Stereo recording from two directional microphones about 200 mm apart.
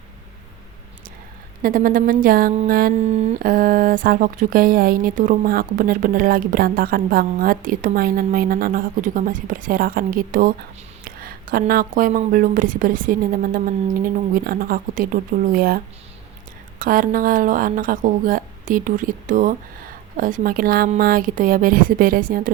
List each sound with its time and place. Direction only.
1.6 s speech: 45° right (ahead or behind)
3.0 s speech: 30° right (ahead or behind)